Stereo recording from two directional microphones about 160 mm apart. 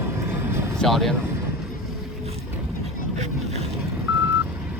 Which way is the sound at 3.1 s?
45° right (ahead or behind).